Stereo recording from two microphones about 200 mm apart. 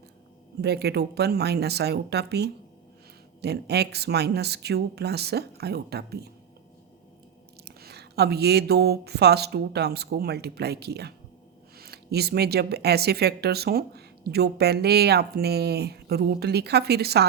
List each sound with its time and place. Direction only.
0.6 s speech: 55° right (ahead or behind)
7.6 s speech: 55° right (ahead or behind)